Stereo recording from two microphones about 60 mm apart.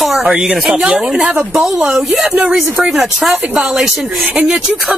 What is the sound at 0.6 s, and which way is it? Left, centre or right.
Speech, right.